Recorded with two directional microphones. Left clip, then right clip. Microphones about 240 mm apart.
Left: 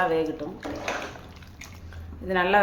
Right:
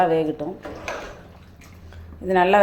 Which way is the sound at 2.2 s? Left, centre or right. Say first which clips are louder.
Right 5 dB; centre.